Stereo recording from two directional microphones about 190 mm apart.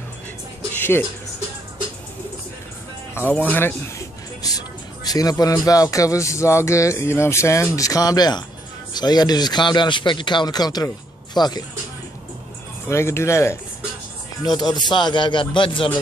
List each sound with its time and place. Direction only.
0.7 s a sound: 10° left (ahead or behind)
3.2 s speech: 10° left (ahead or behind)
12.8 s speech: 15° left (ahead or behind)
14.8 s speech: 25° left (ahead or behind)